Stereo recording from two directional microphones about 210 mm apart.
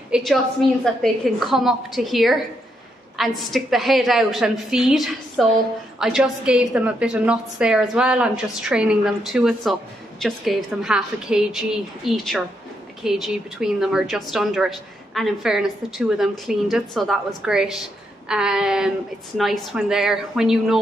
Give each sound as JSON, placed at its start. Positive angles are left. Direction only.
{"t": 0.1, "sound": "a woman's voice", "side_deg": 0}